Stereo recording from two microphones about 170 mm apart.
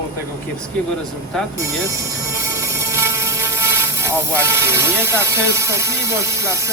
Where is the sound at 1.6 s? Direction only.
15° right (ahead or behind).